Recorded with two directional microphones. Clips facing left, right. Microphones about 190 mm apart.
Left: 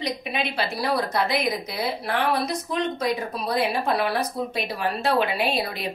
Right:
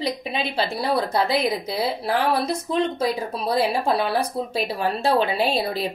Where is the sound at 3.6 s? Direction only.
30° right (ahead or behind).